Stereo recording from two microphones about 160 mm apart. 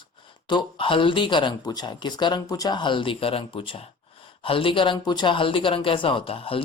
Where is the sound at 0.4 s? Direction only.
30° left (ahead or behind).